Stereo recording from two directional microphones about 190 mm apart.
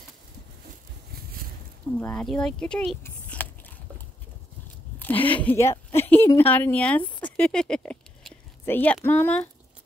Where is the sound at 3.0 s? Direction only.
10° left (ahead or behind).